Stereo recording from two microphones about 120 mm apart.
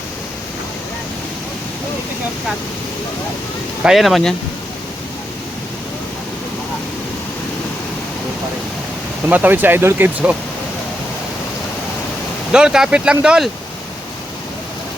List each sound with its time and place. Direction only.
3.8 s speech: centre (ahead or behind)
9.3 s speech: 15° right (ahead or behind)
12.5 s speech: 5° right (ahead or behind)